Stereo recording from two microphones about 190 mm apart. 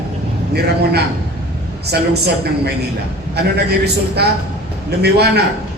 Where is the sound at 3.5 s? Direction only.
60° right (ahead or behind).